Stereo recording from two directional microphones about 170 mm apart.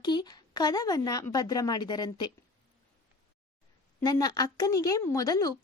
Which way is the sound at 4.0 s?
20° left (ahead or behind).